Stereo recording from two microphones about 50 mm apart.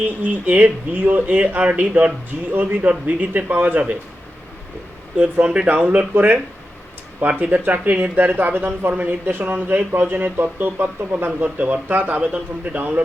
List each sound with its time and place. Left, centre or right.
0.0 s speech: right
5.1 s speech: centre
5.6 s speech: right
11.3 s speech: right
12.2 s speech: right